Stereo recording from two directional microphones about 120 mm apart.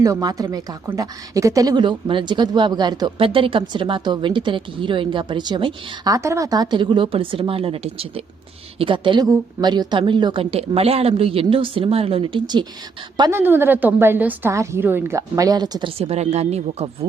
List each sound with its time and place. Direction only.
0.0 s speech: 30° right (ahead or behind)
3.2 s a woman's voice: 45° right (ahead or behind)
6.1 s a woman's voice: 25° right (ahead or behind); by 8.2 s 55° right (ahead or behind)
8.8 s speech: 45° right (ahead or behind)
10.5 s a woman's voice: 55° right (ahead or behind)
13.3 s a woman's voice: 20° right (ahead or behind); by 15.9 s 35° right (ahead or behind)
15.9 s speech: 55° right (ahead or behind)